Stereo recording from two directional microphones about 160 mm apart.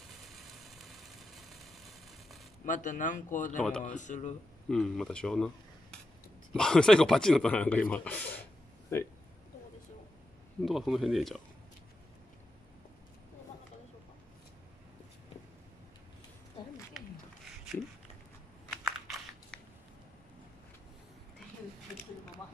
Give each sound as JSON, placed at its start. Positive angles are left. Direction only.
{"t": 0.1, "sound": "vehicle", "side_deg": 0}
{"t": 2.6, "sound": "speech", "side_deg": 55}
{"t": 4.6, "sound": "speech", "side_deg": 5}
{"t": 10.6, "sound": "speech", "side_deg": 0}
{"t": 18.9, "sound": "crunch", "side_deg": 0}